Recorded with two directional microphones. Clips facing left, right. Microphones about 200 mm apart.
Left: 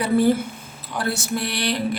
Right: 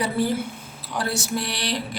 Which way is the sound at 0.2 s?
55° left (ahead or behind).